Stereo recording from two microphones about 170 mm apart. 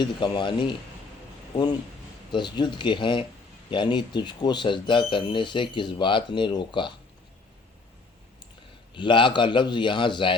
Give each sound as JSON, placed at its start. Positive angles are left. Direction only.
{"t": 0.0, "sound": "speech", "side_deg": 25}
{"t": 2.3, "sound": "speech", "side_deg": 25}
{"t": 8.9, "sound": "speech", "side_deg": 30}